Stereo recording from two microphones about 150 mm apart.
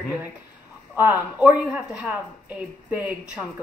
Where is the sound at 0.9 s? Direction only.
15° right (ahead or behind).